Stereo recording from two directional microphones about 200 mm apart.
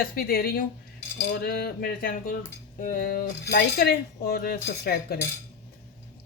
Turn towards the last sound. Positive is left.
turn(degrees=50)  # may be behind; listen again after turning